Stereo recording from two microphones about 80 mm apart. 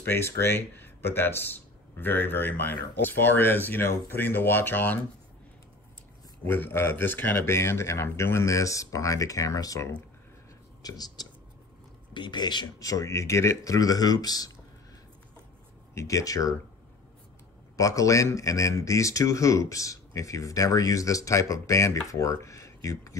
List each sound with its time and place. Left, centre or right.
0.0 s speech: left
6.4 s speech: left
10.8 s speech: left
12.1 s speech: left
12.7 s speech: left
15.9 s speech: left
17.7 s speech: left